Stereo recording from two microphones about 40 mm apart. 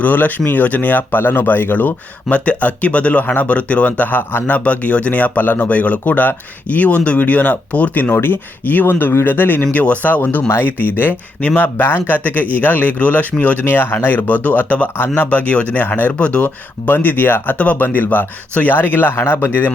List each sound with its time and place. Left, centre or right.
0.0 s speech: left
2.3 s speech: left
4.2 s a man's voice: left
4.4 s speech: left
8.1 s speech: left
8.9 s speech: left
9.7 s speech: left
13.7 s speech: left
14.9 s speech: left
16.8 s speech: left
19.1 s speech: left